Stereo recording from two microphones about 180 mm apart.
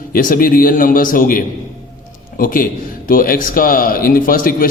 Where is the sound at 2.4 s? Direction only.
50° left (ahead or behind).